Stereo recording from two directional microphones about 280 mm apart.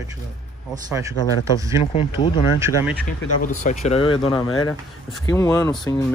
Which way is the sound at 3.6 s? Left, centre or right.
Left.